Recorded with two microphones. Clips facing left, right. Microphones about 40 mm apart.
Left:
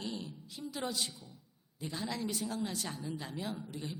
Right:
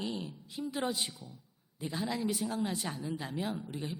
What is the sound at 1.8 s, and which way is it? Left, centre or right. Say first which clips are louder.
Speech: right 3 dB; centre.